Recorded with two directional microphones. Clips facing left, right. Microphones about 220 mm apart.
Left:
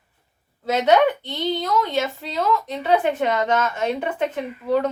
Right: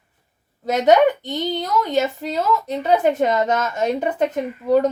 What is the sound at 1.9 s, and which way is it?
A woman's voice, 45° right (ahead or behind).